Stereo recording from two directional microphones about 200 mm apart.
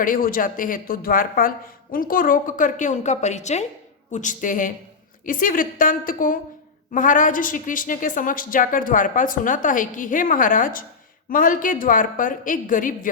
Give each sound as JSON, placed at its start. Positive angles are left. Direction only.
{"t": 0.0, "sound": "a woman's voice", "side_deg": 45}